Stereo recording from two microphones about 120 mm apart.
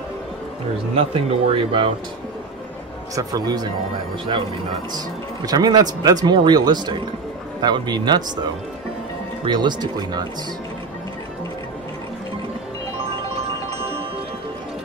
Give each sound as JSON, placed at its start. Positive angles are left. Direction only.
{"t": 1.1, "sound": "speech", "side_deg": -50}
{"t": 3.2, "sound": "speech", "side_deg": -30}
{"t": 4.9, "sound": "speech", "side_deg": -35}
{"t": 9.4, "sound": "speech", "side_deg": -40}